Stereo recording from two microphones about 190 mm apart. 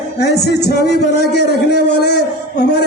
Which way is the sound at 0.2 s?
60° left (ahead or behind).